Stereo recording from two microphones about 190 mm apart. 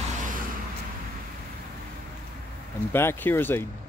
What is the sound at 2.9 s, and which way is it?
Speech, 10° left (ahead or behind).